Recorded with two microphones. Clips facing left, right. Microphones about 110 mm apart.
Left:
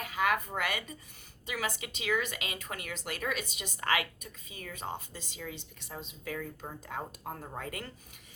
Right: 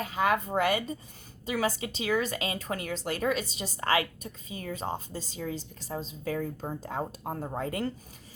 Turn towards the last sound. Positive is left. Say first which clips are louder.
# right 9 dB
turn(degrees=-30)  # may be behind; listen again after turning